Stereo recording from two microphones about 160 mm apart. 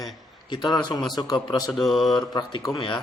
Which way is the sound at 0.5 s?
30° left (ahead or behind).